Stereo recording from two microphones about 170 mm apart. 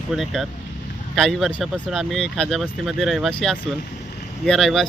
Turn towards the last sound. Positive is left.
turn(degrees=0)  # may be behind; listen again after turning